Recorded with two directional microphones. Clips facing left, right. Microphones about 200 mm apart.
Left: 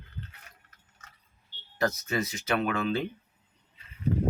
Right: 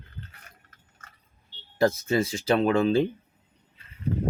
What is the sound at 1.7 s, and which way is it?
Speech, 30° right (ahead or behind).